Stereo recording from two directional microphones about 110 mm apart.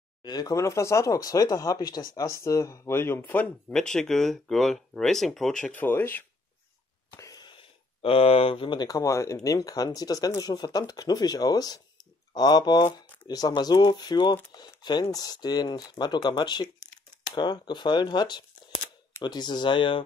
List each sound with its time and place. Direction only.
0.2 s speech: 40° left (ahead or behind); by 3.4 s 20° left (ahead or behind)
3.7 s speech: 5° left (ahead or behind)
7.2 s speech: 35° left (ahead or behind)
16.8 s a sound: 40° left (ahead or behind)
19.2 s speech: 40° left (ahead or behind)